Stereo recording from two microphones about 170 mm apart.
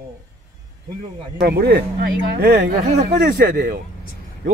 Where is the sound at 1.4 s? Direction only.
65° right (ahead or behind).